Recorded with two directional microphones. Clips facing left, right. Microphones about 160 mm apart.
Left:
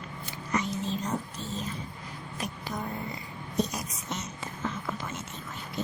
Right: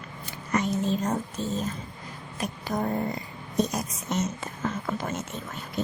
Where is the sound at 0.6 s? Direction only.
50° right (ahead or behind).